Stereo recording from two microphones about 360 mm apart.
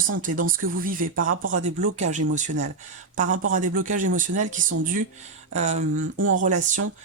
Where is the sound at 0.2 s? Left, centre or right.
Right.